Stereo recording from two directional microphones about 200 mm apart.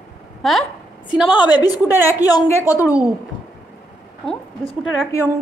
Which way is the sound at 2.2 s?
15° left (ahead or behind).